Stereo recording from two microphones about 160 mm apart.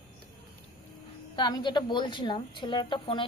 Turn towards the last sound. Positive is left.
turn(degrees=30)  # may be behind; listen again after turning